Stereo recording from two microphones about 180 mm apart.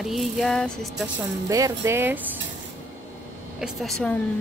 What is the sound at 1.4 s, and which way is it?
Speech, 20° right (ahead or behind).